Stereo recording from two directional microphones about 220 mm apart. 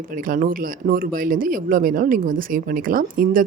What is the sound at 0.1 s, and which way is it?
Speech, 40° right (ahead or behind).